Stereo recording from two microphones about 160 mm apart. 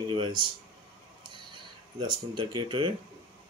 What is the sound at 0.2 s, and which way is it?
Speech, 30° right (ahead or behind).